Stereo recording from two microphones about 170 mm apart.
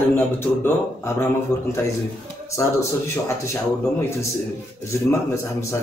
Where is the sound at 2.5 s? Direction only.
15° left (ahead or behind).